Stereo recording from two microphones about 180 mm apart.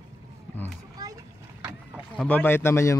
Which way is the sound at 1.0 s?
20° right (ahead or behind).